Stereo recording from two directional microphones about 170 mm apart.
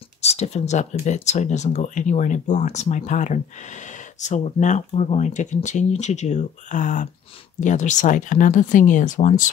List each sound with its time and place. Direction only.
0.2 s speech: 40° left (ahead or behind)